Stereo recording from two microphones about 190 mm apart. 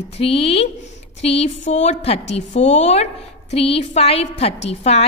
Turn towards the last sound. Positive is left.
turn(degrees=35)  # may be behind; listen again after turning